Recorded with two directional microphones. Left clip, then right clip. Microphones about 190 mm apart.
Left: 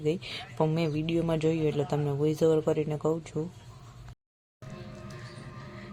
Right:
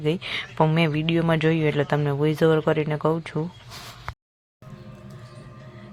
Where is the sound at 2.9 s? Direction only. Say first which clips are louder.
Right 6 dB; 25° right (ahead or behind).